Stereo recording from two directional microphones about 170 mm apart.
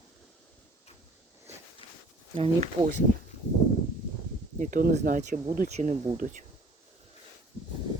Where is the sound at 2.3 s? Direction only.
40° right (ahead or behind).